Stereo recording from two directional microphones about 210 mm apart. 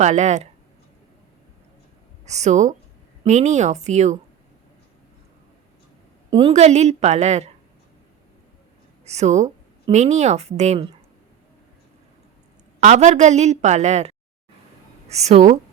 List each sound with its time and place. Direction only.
0.0 s a woman's voice: 35° right (ahead or behind)
2.2 s a woman's voice: 35° right (ahead or behind)
6.5 s a woman's voice: 30° right (ahead or behind)
9.0 s a woman's voice: 30° right (ahead or behind)
12.8 s a woman's voice: 35° right (ahead or behind)